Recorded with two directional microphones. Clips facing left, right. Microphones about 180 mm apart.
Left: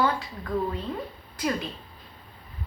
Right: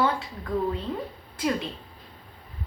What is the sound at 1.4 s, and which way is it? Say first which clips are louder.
Speech: right 1 dB; 25° right (ahead or behind).